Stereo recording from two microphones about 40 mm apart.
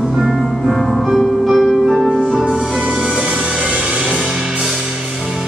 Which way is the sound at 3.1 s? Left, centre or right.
Right.